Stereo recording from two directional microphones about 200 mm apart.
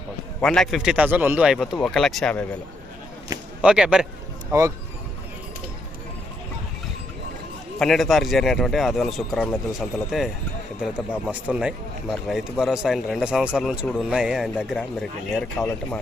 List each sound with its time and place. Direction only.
0.4 s speech: 5° left (ahead or behind)
3.6 s speech: 5° right (ahead or behind)
7.8 s speech: centre (ahead or behind)